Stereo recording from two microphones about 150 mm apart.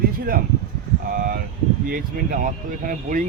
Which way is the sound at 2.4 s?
65° right (ahead or behind).